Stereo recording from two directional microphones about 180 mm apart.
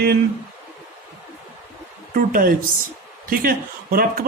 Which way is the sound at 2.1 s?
50° right (ahead or behind).